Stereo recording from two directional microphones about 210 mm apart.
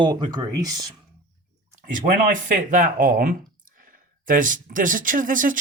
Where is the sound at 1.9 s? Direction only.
40° right (ahead or behind).